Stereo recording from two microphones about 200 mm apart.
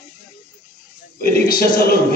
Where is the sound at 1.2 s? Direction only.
50° left (ahead or behind).